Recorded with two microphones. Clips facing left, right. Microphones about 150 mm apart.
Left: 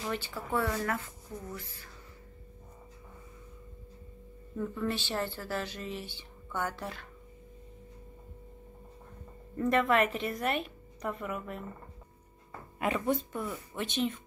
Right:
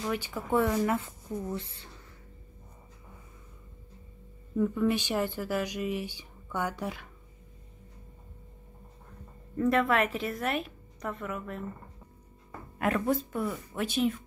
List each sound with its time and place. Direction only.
0.0 s speech: 10° right (ahead or behind); by 1.9 s 25° right (ahead or behind)
4.6 s speech: 10° right (ahead or behind)
9.6 s a woman's voice: centre (ahead or behind)
12.7 s a woman's voice: centre (ahead or behind)